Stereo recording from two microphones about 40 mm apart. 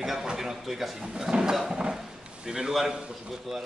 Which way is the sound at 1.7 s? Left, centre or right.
Centre.